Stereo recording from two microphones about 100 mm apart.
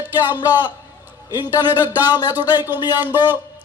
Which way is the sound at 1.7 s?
20° right (ahead or behind).